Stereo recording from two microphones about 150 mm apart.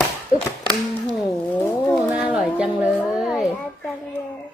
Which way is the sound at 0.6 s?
10° left (ahead or behind).